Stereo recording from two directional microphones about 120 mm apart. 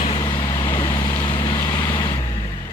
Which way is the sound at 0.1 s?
35° left (ahead or behind).